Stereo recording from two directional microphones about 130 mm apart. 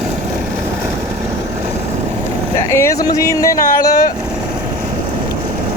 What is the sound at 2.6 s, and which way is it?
Speech, 20° left (ahead or behind).